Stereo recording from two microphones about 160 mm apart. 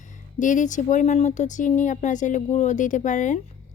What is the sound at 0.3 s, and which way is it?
Speech, 50° left (ahead or behind).